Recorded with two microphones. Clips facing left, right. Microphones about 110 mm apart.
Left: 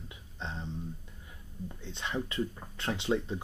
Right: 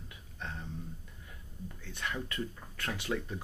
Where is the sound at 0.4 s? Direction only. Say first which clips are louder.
Left 3 dB; 20° left (ahead or behind).